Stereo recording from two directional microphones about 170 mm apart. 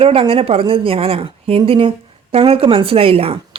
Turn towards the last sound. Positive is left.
turn(degrees=-35)  # may be behind; listen again after turning